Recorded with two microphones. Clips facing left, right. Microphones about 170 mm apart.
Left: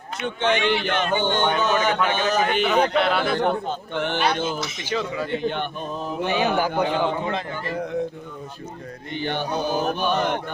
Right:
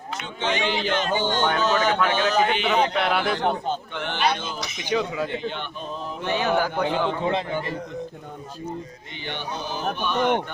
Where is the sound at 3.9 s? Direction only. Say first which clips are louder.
Left 5 dB; 50° left (ahead or behind).